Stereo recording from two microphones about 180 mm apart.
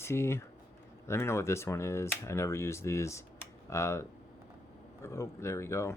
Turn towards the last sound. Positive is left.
turn(degrees=15)  # may be behind; listen again after turning